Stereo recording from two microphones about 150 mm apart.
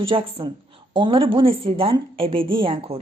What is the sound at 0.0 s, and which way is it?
Speech, 35° right (ahead or behind).